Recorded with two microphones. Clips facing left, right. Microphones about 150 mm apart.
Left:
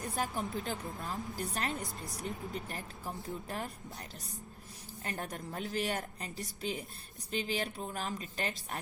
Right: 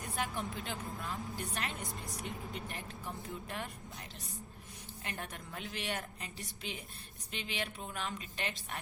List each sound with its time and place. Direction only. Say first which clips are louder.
0.2 s a woman's voice: left 2 dB; 40° left (ahead or behind)
5.0 s a woman's voice: left 5 dB; 40° left (ahead or behind)